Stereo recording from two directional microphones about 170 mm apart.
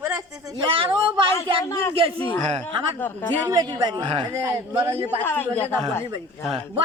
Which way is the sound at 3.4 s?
25° right (ahead or behind).